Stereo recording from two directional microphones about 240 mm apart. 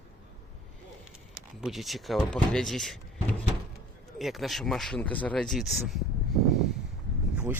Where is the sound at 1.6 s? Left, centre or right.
Centre.